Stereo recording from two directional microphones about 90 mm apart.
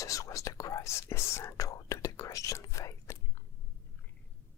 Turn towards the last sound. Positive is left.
turn(degrees=35)  # may be behind; listen again after turning